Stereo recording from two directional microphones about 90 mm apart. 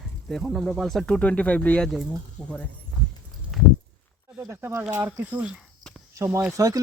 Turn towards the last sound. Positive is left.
turn(degrees=-40)  # may be behind; listen again after turning